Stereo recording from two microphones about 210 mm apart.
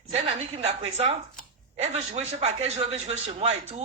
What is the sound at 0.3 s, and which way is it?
A woman's voice, 30° right (ahead or behind).